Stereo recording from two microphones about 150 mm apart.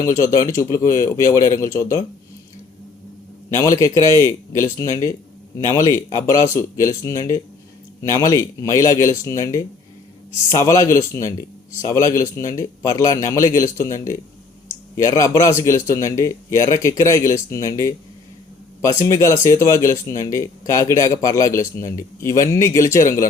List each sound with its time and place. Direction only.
0.5 s speech: 20° left (ahead or behind)
3.8 s speech: 20° left (ahead or behind)